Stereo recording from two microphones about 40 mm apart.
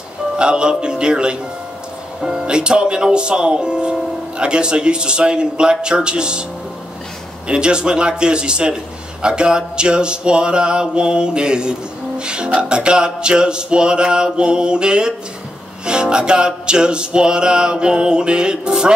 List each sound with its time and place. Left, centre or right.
0.4 s speech: right
2.4 s speech: right
7.4 s speech: right
12.2 s music: right
12.5 s speech: right